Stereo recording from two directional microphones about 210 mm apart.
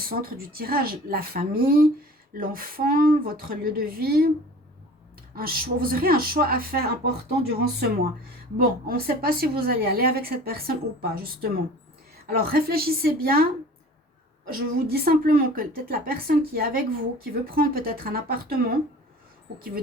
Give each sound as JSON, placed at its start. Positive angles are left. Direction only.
{"t": 0.0, "sound": "a woman's voice", "side_deg": -45}
{"t": 5.3, "sound": "a woman's voice", "side_deg": -45}